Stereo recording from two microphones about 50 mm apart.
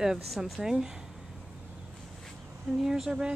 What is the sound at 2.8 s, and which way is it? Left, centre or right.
Speech, centre.